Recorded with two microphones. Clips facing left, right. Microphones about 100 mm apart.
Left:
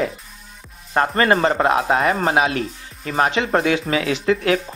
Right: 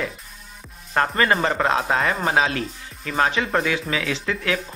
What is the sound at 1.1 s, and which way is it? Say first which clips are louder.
Speech: left 5 dB; 30° left (ahead or behind).